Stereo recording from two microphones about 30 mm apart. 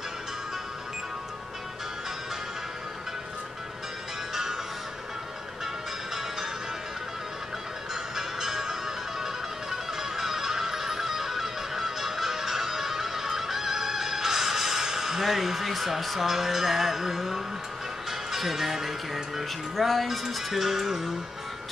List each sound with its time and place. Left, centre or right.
4.3 s music: centre
7.9 s music: centre
16.3 s speech: centre